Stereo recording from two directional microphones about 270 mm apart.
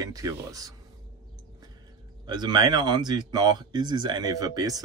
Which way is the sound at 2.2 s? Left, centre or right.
Centre.